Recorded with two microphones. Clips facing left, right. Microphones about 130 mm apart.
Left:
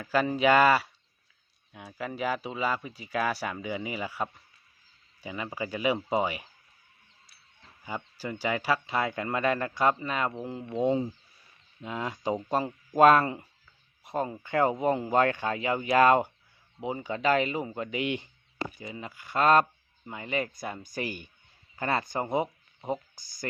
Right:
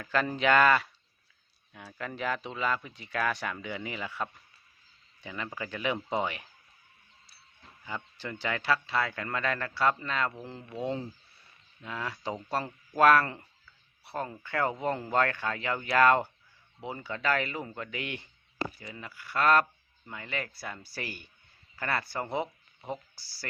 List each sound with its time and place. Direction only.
0.0 s speech: 10° left (ahead or behind)
7.9 s speech: 15° left (ahead or behind)